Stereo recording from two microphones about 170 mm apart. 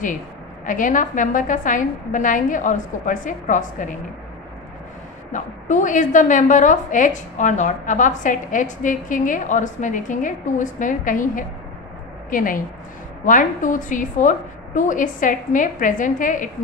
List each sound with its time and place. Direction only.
0.7 s a woman's voice: 50° left (ahead or behind)
5.3 s a woman's voice: 45° left (ahead or behind)